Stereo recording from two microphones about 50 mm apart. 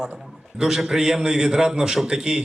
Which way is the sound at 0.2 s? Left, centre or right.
Centre.